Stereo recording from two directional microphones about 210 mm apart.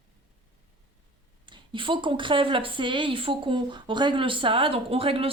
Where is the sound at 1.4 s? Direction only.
25° right (ahead or behind).